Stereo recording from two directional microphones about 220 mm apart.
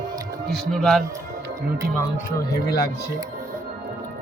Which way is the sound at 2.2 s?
45° left (ahead or behind).